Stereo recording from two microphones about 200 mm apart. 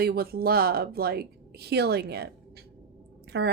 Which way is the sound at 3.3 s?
55° right (ahead or behind).